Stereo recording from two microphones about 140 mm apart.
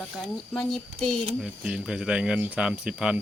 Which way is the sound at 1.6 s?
5° right (ahead or behind).